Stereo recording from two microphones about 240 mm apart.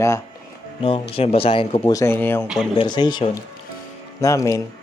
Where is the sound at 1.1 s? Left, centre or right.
Left; by 2.4 s centre.